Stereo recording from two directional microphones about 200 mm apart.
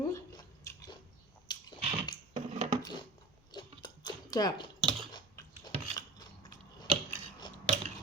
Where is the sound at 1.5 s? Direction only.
20° left (ahead or behind).